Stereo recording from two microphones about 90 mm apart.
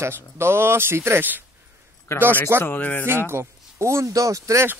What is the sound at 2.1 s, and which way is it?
Speech, 30° left (ahead or behind).